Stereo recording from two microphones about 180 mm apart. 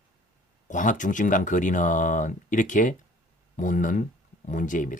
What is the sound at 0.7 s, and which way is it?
Speech, 45° left (ahead or behind).